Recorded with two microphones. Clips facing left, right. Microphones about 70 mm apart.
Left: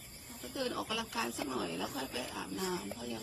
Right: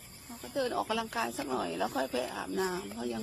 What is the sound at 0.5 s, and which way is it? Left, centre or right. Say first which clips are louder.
Speech: right 6 dB; right.